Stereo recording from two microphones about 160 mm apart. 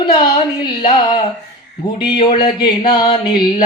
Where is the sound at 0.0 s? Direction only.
30° left (ahead or behind).